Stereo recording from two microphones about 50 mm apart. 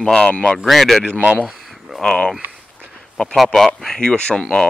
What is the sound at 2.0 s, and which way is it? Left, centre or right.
Speech, centre.